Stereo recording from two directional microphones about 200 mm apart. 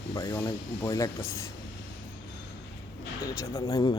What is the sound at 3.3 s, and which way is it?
Speech, 15° left (ahead or behind).